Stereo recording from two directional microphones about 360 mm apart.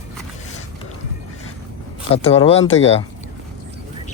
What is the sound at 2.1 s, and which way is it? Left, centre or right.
Speech, centre.